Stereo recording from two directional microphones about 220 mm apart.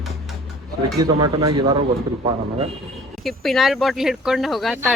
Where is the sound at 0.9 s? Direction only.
20° right (ahead or behind).